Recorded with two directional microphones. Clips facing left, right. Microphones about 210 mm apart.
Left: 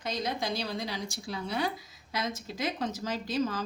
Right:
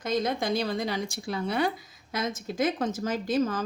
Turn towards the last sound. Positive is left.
turn(degrees=-50)  # may be behind; listen again after turning